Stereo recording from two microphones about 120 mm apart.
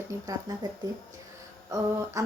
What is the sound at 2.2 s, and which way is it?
Speech, 25° right (ahead or behind).